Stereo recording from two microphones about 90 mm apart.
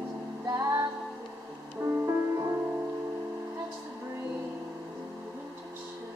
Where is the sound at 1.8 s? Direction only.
30° right (ahead or behind).